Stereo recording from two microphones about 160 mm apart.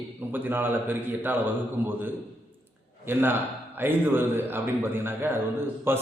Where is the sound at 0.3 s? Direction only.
10° right (ahead or behind).